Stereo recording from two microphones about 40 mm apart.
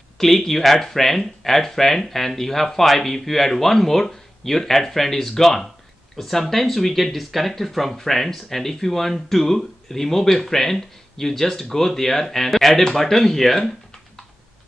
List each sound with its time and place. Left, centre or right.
0.2 s speech: centre